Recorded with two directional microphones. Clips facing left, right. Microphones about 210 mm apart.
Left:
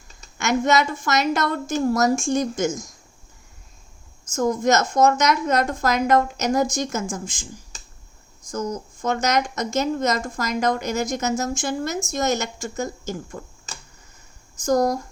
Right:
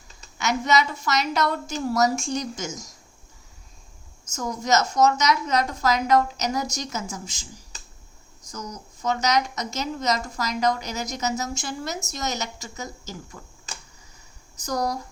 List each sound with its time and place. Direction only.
0.3 s a woman's voice: 50° left (ahead or behind)
4.3 s a woman's voice: 50° left (ahead or behind)
8.4 s a woman's voice: 50° left (ahead or behind)
14.5 s speech: 50° left (ahead or behind)